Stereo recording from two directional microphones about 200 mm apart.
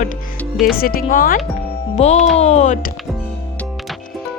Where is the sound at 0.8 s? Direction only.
45° left (ahead or behind).